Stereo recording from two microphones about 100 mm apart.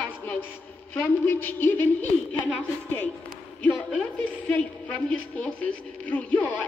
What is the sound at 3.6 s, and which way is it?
A woman's voice, 15° left (ahead or behind).